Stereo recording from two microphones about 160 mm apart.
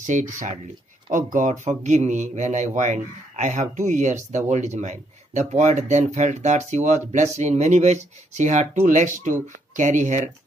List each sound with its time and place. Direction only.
0.0 s speech: 50° right (ahead or behind)